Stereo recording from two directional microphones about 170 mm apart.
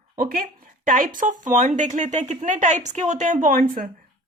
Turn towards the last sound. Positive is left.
turn(degrees=-55)  # may be behind; listen again after turning